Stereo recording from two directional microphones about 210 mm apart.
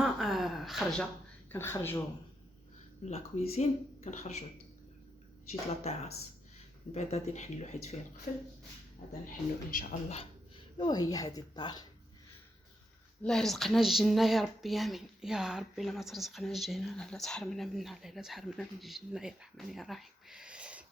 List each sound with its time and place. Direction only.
0.0 s gasp: centre (ahead or behind)
1.5 s speech: 10° left (ahead or behind)
3.0 s speech: 30° left (ahead or behind)
5.5 s speech: 30° left (ahead or behind)
9.7 s speech: 30° left (ahead or behind)
10.8 s speech: 20° left (ahead or behind)
13.2 s speech: centre (ahead or behind)